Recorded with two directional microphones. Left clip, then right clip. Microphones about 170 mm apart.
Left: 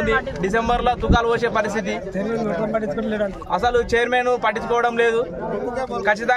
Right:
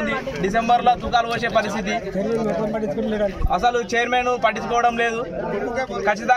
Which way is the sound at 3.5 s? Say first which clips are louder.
Left 2 dB; 15° left (ahead or behind).